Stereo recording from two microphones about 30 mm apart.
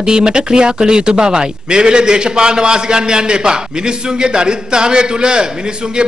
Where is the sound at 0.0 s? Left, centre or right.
Right.